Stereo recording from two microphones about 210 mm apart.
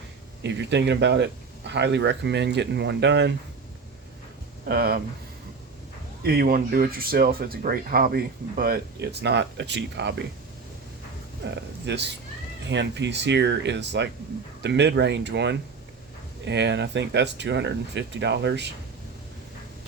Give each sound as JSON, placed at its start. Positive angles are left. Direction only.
{"t": 0.4, "sound": "speech", "side_deg": -55}
{"t": 4.7, "sound": "speech", "side_deg": -50}
{"t": 6.2, "sound": "speech", "side_deg": -45}
{"t": 11.4, "sound": "speech", "side_deg": -55}